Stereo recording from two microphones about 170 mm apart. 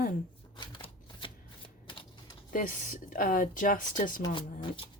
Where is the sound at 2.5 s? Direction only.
55° left (ahead or behind).